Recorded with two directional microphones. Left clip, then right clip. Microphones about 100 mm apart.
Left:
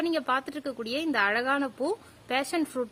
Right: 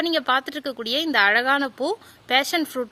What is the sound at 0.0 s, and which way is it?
Speech, 35° right (ahead or behind).